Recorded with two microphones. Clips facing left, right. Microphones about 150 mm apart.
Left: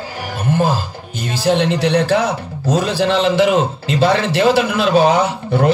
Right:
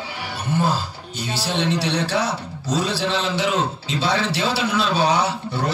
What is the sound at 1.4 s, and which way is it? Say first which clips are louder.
A man's voice: left 8 dB; 55° left (ahead or behind).